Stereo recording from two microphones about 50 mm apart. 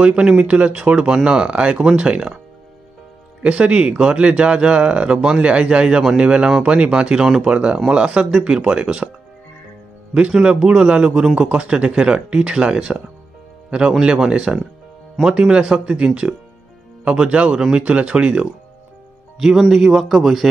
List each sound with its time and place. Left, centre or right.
0.0 s speech: right
3.4 s speech: right
7.4 s speech: right
10.3 s speech: centre
17.0 s speech: right
19.3 s speech: centre